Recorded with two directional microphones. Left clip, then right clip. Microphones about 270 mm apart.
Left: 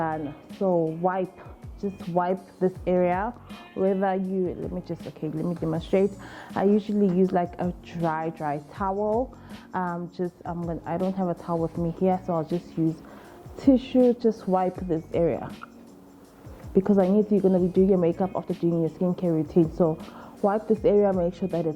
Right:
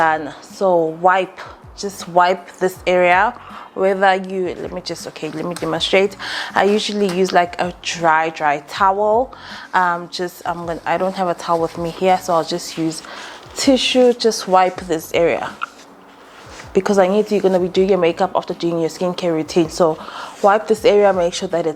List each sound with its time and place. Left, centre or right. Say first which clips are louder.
0.0 s speech: right 13 dB; centre
1.1 s speech: right 12 dB; centre
9.0 s speech: right 10 dB; right
9.7 s speech: right 13 dB; centre
16.7 s speech: right 8 dB; centre